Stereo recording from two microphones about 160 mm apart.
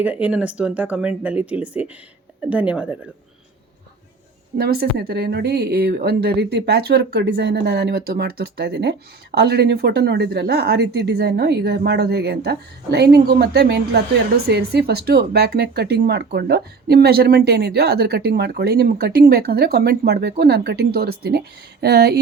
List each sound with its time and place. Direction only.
0.0 s speech: 10° right (ahead or behind)
4.5 s a woman's voice: 75° right (ahead or behind)